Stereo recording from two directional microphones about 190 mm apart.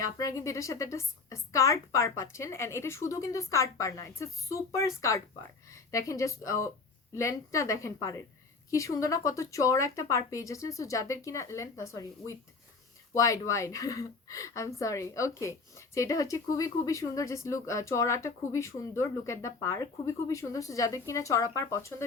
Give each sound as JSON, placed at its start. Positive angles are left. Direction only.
{"t": 0.0, "sound": "speech", "side_deg": 15}